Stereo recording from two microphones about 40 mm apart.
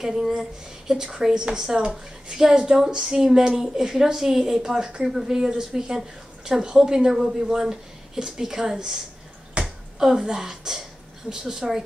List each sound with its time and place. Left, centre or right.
0.0 s speech: centre
9.6 s finger snapping: right
9.9 s speech: centre